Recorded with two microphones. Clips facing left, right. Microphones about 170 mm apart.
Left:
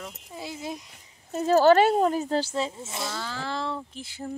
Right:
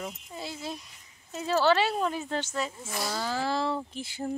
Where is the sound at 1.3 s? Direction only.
45° left (ahead or behind); by 3.2 s 25° left (ahead or behind).